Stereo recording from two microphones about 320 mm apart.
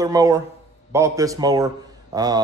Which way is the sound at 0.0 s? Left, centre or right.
Centre.